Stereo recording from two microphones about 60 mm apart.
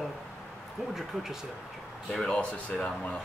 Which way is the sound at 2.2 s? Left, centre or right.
Centre.